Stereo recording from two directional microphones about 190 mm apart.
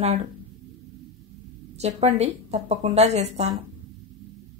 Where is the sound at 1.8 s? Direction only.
35° right (ahead or behind).